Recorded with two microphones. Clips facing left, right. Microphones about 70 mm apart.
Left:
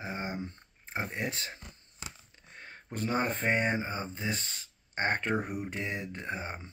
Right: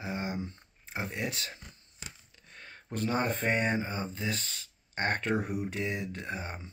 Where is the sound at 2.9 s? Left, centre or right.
Left.